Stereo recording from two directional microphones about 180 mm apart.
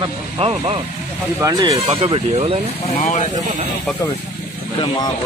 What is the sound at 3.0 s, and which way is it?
Speech, 40° left (ahead or behind).